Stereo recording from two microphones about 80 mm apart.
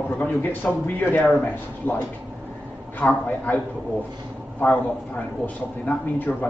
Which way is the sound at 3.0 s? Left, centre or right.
Left.